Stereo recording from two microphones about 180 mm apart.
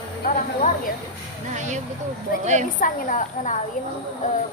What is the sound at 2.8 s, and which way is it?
Speech, 45° left (ahead or behind).